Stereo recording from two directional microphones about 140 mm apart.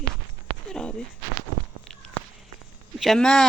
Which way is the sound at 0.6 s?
5° left (ahead or behind).